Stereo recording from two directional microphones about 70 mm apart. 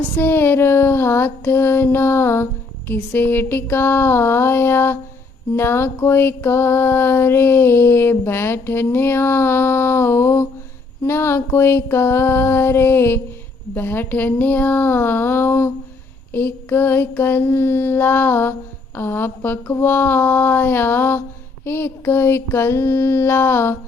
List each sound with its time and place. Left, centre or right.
0.2 s mantra: left
13.7 s speech: left
16.3 s mantra: left